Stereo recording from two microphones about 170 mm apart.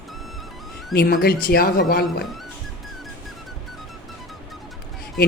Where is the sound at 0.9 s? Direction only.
65° left (ahead or behind).